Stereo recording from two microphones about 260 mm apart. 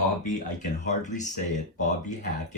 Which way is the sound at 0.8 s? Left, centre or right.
Left.